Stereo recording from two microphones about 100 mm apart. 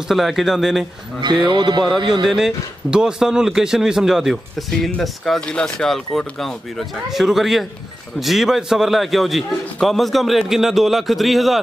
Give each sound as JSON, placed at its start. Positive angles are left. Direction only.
{"t": 0.1, "sound": "speech", "side_deg": 0}
{"t": 1.2, "sound": "music", "side_deg": -50}
{"t": 2.2, "sound": "speech", "side_deg": -5}